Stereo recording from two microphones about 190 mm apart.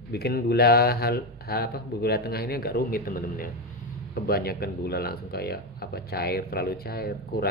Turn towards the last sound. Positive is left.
turn(degrees=55)  # may be behind; listen again after turning